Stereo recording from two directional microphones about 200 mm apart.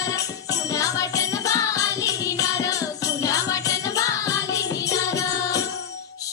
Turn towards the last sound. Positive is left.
turn(degrees=15)  # may be behind; listen again after turning